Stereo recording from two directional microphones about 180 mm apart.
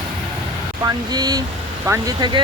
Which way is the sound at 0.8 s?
20° right (ahead or behind).